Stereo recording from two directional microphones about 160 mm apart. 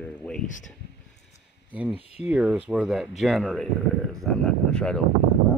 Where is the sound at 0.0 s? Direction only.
10° left (ahead or behind).